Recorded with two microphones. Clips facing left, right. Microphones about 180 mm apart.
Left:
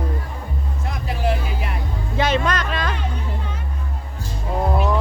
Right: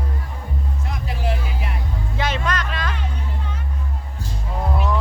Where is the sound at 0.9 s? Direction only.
50° left (ahead or behind).